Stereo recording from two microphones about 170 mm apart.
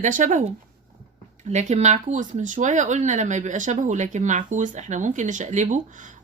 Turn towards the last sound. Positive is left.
turn(degrees=-50)  # may be behind; listen again after turning